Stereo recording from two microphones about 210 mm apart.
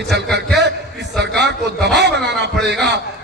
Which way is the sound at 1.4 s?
55° right (ahead or behind).